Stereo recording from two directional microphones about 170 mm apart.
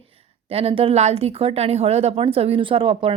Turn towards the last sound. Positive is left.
turn(degrees=-30)  # may be behind; listen again after turning